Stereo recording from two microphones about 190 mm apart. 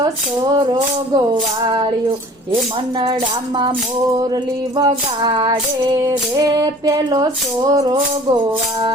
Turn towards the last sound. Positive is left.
turn(degrees=-20)  # may be behind; listen again after turning